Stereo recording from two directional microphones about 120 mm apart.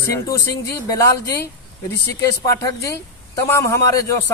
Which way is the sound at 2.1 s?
30° left (ahead or behind).